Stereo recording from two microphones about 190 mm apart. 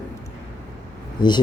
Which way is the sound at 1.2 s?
25° left (ahead or behind).